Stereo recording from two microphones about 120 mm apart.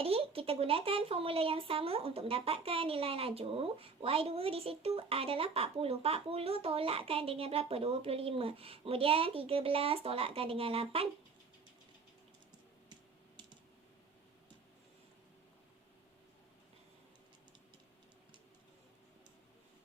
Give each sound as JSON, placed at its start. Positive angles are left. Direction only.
{"t": 0.0, "sound": "a woman's voice", "side_deg": -50}
{"t": 12.9, "sound": "computer keyboard", "side_deg": -40}